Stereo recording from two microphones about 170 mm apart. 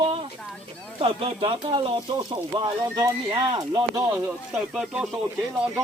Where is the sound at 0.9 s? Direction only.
35° right (ahead or behind).